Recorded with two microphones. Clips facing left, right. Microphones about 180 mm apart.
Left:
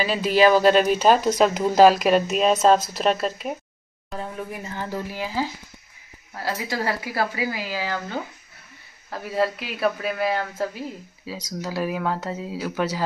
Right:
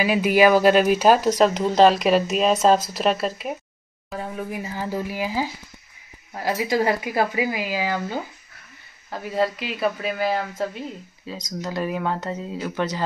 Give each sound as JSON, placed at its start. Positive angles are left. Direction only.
{"t": 0.0, "sound": "speech", "side_deg": -10}
{"t": 1.4, "sound": "speech", "side_deg": 5}
{"t": 9.1, "sound": "speech", "side_deg": 0}